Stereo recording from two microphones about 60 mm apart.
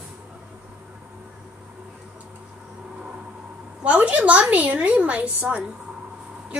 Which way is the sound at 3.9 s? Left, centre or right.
Right.